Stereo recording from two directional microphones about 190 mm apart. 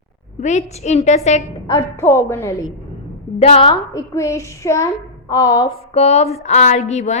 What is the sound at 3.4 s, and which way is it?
Speech, 30° left (ahead or behind).